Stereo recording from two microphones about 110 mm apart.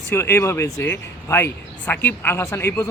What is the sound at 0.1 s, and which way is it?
Speech, 25° left (ahead or behind).